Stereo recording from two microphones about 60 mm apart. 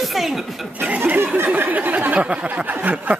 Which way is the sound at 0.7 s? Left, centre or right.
Right.